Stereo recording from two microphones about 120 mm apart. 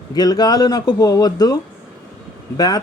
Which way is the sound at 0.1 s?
35° left (ahead or behind).